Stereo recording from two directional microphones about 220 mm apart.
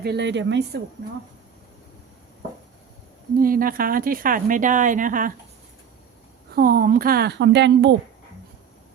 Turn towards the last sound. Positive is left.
turn(degrees=-50)  # may be behind; listen again after turning